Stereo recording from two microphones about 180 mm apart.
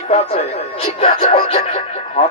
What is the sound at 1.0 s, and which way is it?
Music, 30° left (ahead or behind).